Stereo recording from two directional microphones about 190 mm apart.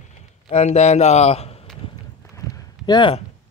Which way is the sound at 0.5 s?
35° left (ahead or behind).